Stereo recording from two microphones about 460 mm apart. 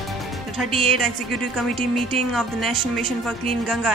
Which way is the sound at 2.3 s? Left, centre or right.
Centre.